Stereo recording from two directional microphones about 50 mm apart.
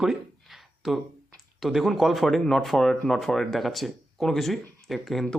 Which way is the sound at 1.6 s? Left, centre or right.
Centre.